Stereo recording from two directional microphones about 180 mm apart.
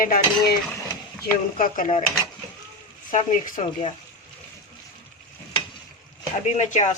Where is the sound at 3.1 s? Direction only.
45° left (ahead or behind).